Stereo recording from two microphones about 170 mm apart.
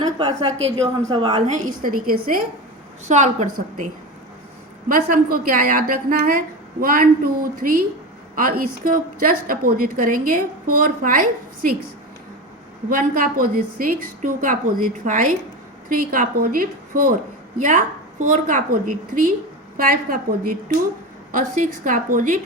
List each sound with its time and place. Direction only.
0.2 s a woman's voice: 25° right (ahead or behind)
1.5 s a woman's voice: 55° right (ahead or behind)
3.1 s a woman's voice: 45° right (ahead or behind)
4.9 s a woman's voice: 55° right (ahead or behind)
12.9 s a woman's voice: 55° right (ahead or behind)